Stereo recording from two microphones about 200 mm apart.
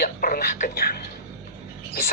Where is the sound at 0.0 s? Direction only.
45° left (ahead or behind).